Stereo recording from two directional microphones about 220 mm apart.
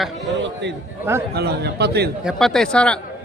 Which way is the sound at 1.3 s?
50° right (ahead or behind).